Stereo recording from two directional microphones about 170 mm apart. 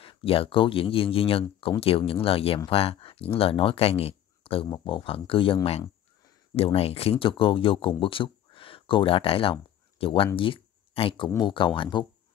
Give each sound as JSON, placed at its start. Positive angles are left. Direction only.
{"t": 0.0, "sound": "speech", "side_deg": 35}